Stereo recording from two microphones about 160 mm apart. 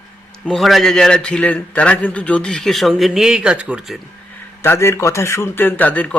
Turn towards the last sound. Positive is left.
turn(degrees=10)  # may be behind; listen again after turning